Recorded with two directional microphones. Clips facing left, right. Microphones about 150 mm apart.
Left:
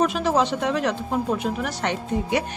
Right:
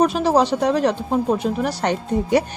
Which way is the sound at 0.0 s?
35° right (ahead or behind).